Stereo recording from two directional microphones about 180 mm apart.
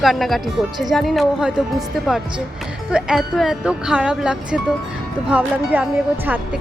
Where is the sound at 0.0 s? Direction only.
Centre (ahead or behind).